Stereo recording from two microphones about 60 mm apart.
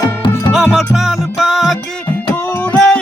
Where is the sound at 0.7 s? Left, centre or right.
Centre.